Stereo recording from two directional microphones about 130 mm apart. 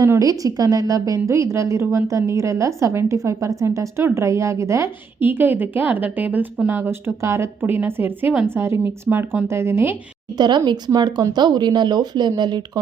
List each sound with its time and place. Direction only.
0.0 s a woman's voice: 25° right (ahead or behind)
10.3 s speech: 35° right (ahead or behind)